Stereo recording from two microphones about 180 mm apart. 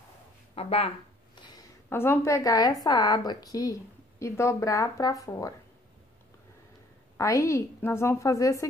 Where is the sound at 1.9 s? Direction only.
15° left (ahead or behind).